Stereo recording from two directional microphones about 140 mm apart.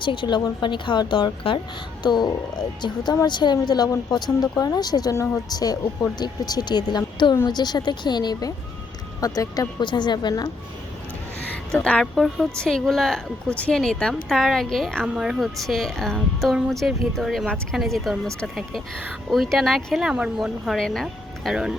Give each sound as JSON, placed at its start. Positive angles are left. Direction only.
{"t": 0.0, "sound": "a woman's voice", "side_deg": 35}
{"t": 11.5, "sound": "a woman's voice", "side_deg": 10}